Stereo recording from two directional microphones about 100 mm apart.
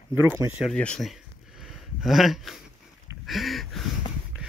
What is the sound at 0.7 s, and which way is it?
Speech, 10° left (ahead or behind).